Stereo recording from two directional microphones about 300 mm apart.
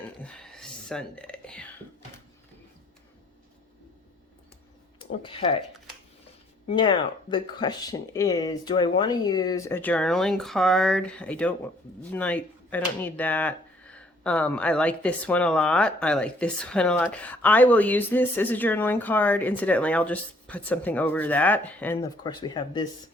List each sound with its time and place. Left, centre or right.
0.2 s whispering: centre
4.9 s speech: centre
6.7 s speech: centre